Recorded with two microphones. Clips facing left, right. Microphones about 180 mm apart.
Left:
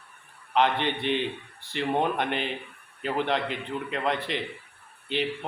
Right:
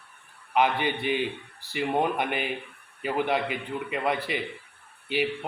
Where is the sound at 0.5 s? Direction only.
10° right (ahead or behind).